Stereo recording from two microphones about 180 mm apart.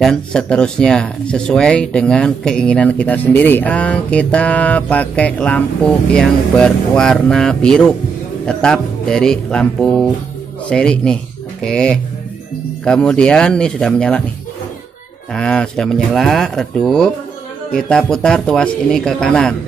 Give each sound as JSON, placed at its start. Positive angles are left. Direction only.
{"t": 0.0, "sound": "speech", "side_deg": 5}
{"t": 15.3, "sound": "speech", "side_deg": 5}